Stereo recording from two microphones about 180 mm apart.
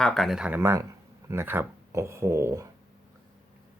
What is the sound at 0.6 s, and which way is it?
Speech, 15° right (ahead or behind).